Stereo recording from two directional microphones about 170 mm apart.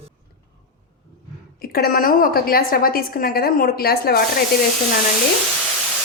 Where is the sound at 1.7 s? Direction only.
60° left (ahead or behind).